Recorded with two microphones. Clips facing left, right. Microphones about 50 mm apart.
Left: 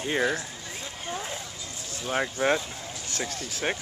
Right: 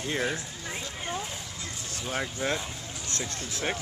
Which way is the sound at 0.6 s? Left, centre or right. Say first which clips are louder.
Right 2 dB; right.